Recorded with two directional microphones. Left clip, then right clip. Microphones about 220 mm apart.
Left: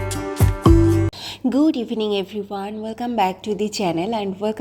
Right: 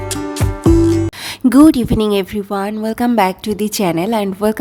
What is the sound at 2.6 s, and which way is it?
A woman's voice, 35° right (ahead or behind).